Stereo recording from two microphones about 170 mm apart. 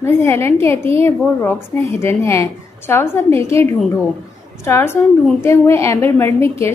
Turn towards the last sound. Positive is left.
turn(degrees=15)  # may be behind; listen again after turning